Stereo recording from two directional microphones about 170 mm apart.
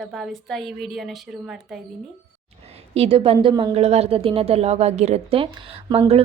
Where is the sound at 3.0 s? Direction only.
35° right (ahead or behind).